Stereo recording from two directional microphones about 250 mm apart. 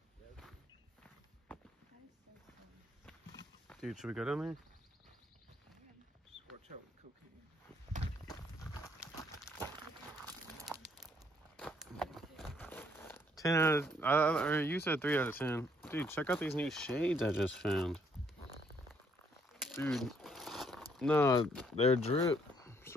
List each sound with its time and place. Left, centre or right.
3.8 s speech: centre
8.3 s clip-clop: centre
10.2 s crumpling: centre
11.5 s speech: centre
19.7 s crumpling: centre
20.9 s speech: centre
21.7 s speech: left
22.6 s cricket: centre